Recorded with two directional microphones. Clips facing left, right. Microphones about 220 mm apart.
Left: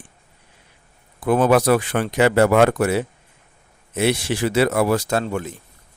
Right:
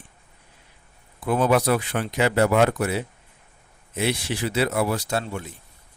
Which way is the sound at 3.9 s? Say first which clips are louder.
Left 5 dB; 80° left.